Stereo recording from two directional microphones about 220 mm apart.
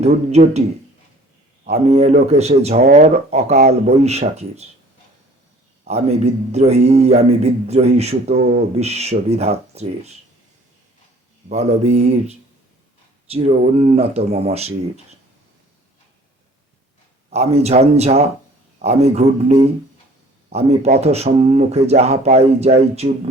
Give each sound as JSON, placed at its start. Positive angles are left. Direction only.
{"t": 0.0, "sound": "a man's voice", "side_deg": -30}
{"t": 1.9, "sound": "a man's voice", "side_deg": -30}
{"t": 5.9, "sound": "a man's voice", "side_deg": -30}
{"t": 8.4, "sound": "speech", "side_deg": -45}
{"t": 8.8, "sound": "a man's voice", "side_deg": -30}
{"t": 11.4, "sound": "a man's voice", "side_deg": -30}
{"t": 17.2, "sound": "a man's voice", "side_deg": -30}